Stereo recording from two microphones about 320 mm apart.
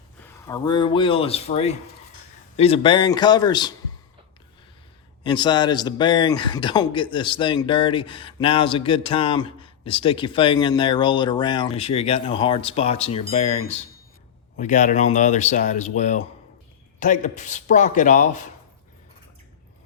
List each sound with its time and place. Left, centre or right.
0.2 s speech: centre
5.2 s speech: centre